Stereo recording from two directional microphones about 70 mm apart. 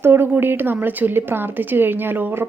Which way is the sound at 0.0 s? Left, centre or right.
Right.